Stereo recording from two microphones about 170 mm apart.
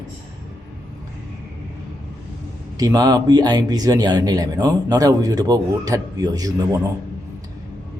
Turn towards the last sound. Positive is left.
turn(degrees=-20)  # may be behind; listen again after turning